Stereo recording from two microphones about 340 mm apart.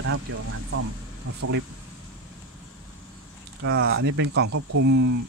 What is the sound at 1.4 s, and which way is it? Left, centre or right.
Speech, right.